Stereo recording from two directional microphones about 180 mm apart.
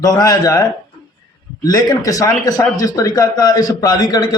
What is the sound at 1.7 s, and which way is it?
A man's voice, 20° left (ahead or behind).